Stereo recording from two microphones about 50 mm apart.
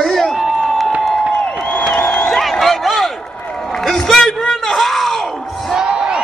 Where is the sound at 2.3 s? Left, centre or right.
Centre.